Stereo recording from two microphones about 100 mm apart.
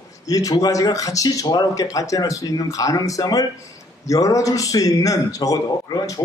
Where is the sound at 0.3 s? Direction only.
35° left (ahead or behind).